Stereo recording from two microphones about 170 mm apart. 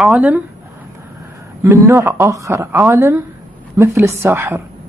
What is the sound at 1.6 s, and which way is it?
Speech, 15° right (ahead or behind).